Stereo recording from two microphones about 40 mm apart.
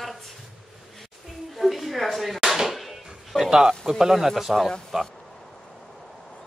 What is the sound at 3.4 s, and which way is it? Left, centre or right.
Speech, centre.